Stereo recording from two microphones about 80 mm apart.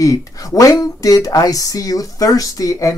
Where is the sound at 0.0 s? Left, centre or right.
Left.